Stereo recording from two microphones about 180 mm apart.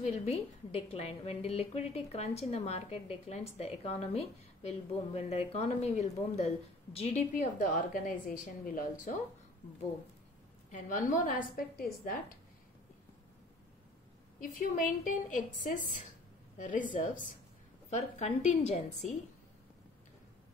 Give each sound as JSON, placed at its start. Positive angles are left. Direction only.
{"t": 0.0, "sound": "a woman's voice", "side_deg": 35}
{"t": 10.7, "sound": "a woman's voice", "side_deg": 45}
{"t": 14.4, "sound": "a woman's voice", "side_deg": 50}